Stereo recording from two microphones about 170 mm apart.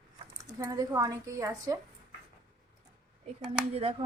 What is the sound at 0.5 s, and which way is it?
Speech, 20° right (ahead or behind).